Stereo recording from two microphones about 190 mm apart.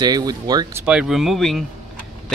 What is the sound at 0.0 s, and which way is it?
Speech, 20° right (ahead or behind).